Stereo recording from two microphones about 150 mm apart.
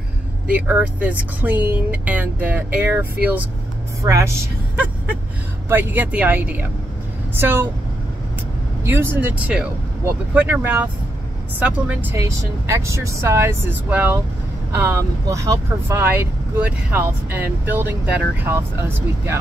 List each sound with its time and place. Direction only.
0.5 s a woman's voice: 10° right (ahead or behind)
5.7 s speech: 15° right (ahead or behind)
8.8 s speech: 15° right (ahead or behind)
12.2 s speech: 20° right (ahead or behind)